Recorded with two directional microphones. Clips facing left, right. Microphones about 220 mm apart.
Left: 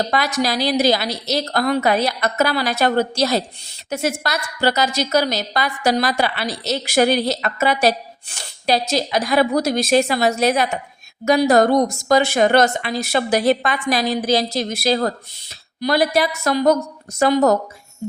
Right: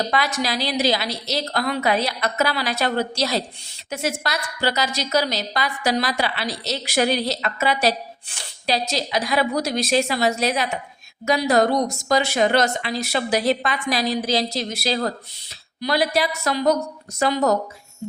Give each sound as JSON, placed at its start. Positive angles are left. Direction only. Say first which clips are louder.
{"t": 0.1, "sound": "a woman's voice", "louder": "left 3 dB", "side_deg": 40}